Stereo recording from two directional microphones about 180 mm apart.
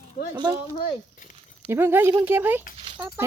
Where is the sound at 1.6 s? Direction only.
10° right (ahead or behind).